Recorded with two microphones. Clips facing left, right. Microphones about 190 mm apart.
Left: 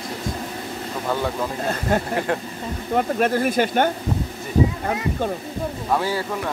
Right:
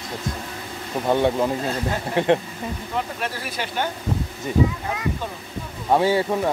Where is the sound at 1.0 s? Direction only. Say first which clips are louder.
Right 4 dB; 25° right (ahead or behind).